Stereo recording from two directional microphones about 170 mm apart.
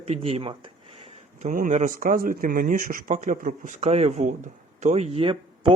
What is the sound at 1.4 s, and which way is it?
Speech, 50° right (ahead or behind).